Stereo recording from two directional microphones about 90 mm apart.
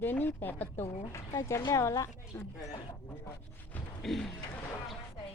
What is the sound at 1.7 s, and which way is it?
A woman's voice, 35° left (ahead or behind).